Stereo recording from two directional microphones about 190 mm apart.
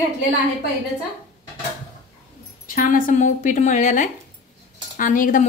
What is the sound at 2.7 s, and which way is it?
Speech, 45° left (ahead or behind).